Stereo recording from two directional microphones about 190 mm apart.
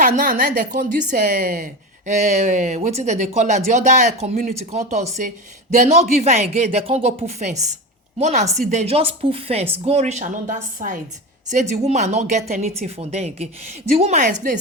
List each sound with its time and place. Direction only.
0.2 s speech: 45° right (ahead or behind)